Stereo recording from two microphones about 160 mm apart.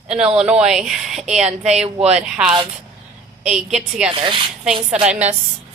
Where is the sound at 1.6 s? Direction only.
40° right (ahead or behind).